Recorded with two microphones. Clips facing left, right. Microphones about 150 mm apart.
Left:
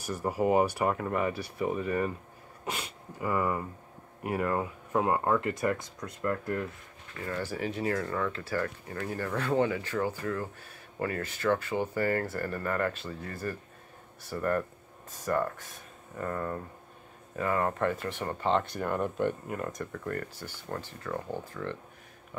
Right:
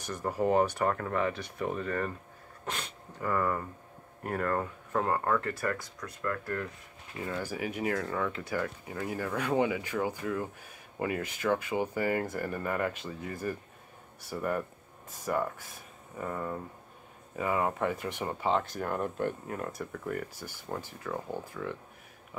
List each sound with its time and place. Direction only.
0.0 s speech: 10° left (ahead or behind)
7.2 s speech: 10° right (ahead or behind)
22.3 s a sound: 5° right (ahead or behind)